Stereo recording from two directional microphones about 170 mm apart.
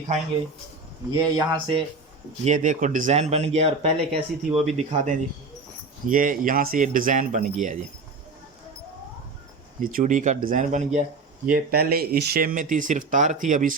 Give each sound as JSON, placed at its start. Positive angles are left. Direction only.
{"t": 1.4, "sound": "speech", "side_deg": -30}
{"t": 2.4, "sound": "speech", "side_deg": -45}
{"t": 9.8, "sound": "speech", "side_deg": -50}
{"t": 11.4, "sound": "speech", "side_deg": -60}